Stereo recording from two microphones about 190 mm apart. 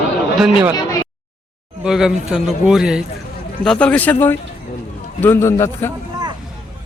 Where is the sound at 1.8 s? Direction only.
Centre (ahead or behind).